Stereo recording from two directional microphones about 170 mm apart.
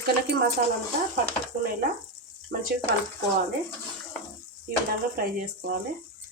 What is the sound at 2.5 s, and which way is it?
Speech, 60° right (ahead or behind).